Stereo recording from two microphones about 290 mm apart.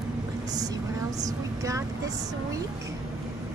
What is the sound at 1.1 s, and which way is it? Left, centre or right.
A woman's voice, centre.